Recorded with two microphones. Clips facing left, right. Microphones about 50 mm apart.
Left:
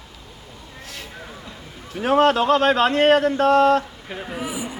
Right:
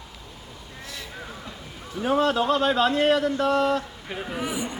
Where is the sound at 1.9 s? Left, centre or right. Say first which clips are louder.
Left 5 dB; left.